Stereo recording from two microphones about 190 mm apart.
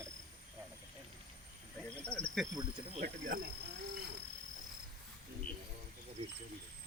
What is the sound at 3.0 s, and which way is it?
Speech, 45° right (ahead or behind).